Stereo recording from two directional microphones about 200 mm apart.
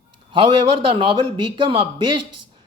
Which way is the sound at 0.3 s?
25° right (ahead or behind).